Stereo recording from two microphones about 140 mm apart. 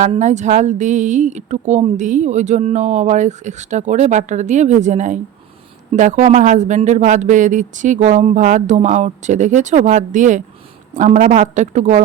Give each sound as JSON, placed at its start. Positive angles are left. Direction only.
{"t": 0.2, "sound": "speech", "side_deg": -60}